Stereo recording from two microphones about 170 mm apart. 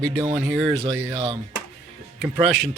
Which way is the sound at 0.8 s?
30° right (ahead or behind).